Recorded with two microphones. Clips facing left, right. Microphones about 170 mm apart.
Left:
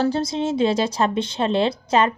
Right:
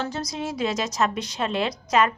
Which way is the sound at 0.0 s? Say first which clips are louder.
Left 8 dB; 30° left (ahead or behind).